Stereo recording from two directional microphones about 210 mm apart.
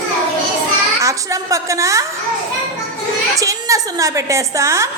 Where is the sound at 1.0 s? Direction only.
15° right (ahead or behind).